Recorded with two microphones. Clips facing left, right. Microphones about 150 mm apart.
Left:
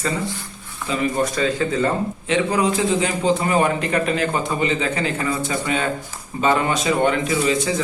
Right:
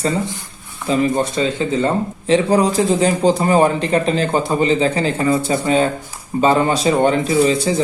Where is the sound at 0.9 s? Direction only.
25° right (ahead or behind).